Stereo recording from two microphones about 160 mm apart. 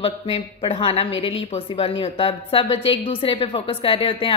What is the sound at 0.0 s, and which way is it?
A woman's voice, 40° left (ahead or behind).